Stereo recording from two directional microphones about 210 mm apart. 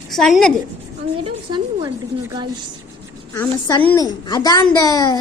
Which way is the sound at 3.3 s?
15° left (ahead or behind).